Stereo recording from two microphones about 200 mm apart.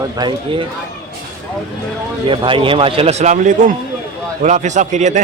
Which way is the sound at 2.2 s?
25° right (ahead or behind).